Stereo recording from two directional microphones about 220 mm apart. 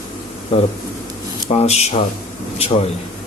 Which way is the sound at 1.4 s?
30° left (ahead or behind).